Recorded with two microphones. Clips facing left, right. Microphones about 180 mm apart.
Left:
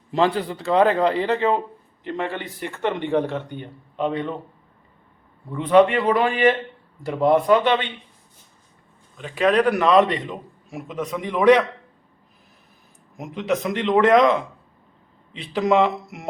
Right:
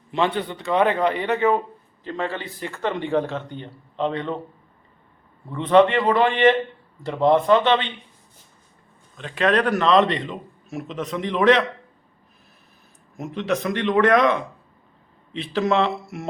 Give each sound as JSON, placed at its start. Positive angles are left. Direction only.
{"t": 0.1, "sound": "a man's voice", "side_deg": 35}
{"t": 5.5, "sound": "a man's voice", "side_deg": 10}
{"t": 9.1, "sound": "a man's voice", "side_deg": 10}
{"t": 13.1, "sound": "a man's voice", "side_deg": 15}
{"t": 15.4, "sound": "a man's voice", "side_deg": 15}